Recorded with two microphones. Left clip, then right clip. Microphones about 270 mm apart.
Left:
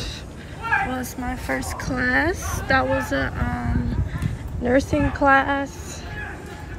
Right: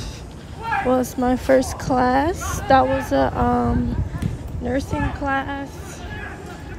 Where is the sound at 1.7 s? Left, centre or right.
Centre.